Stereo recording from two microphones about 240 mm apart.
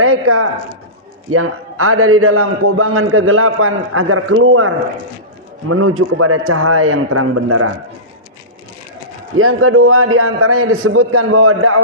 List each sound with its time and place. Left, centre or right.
0.0 s a man's voice: right
9.4 s a man's voice: right